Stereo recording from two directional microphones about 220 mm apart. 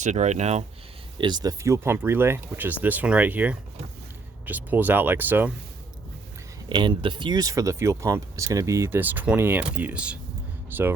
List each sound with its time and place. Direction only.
0.0 s speech: 35° right (ahead or behind)
1.2 s speech: 20° right (ahead or behind)
6.7 s speech: 20° right (ahead or behind)